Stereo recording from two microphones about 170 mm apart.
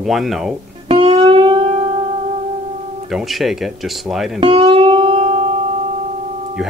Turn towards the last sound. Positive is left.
turn(degrees=-35)  # may be behind; listen again after turning